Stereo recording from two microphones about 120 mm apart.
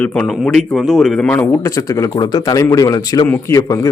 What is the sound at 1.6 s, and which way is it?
A man's voice, 25° left (ahead or behind).